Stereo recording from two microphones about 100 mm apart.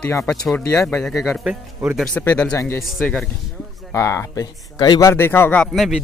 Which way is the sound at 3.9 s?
30° left (ahead or behind).